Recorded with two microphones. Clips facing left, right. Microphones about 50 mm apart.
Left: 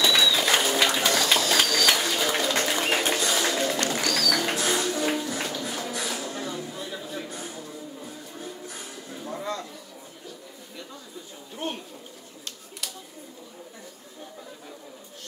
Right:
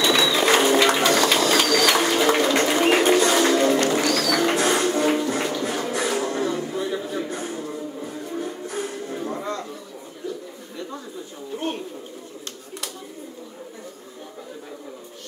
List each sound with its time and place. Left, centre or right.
0.0 s a sound: right
0.4 s bird: right
2.3 s music: right
9.4 s chatter: right